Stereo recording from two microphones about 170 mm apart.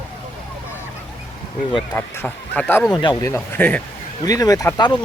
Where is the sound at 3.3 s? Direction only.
10° left (ahead or behind).